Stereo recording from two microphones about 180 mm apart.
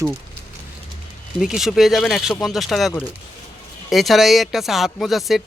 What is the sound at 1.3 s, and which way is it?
Speech, centre (ahead or behind).